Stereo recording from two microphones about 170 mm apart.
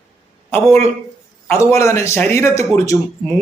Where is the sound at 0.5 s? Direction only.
15° left (ahead or behind).